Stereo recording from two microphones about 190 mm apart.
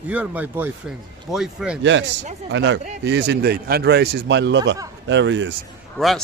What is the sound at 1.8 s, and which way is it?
A man's voice, 75° right (ahead or behind).